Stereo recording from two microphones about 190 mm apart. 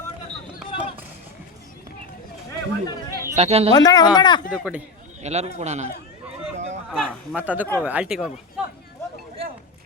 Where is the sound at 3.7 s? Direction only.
20° left (ahead or behind).